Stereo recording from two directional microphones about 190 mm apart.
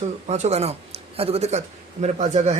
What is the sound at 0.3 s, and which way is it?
Speech, 35° right (ahead or behind).